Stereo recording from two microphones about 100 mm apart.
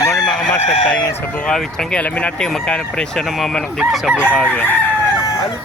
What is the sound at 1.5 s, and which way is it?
Speech, 5° left (ahead or behind).